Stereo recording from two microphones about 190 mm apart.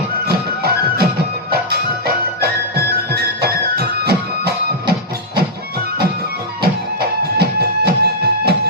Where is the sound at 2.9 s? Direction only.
55° right (ahead or behind).